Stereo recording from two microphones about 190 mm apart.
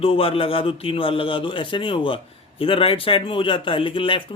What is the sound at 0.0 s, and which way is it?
A man's voice, 30° left (ahead or behind).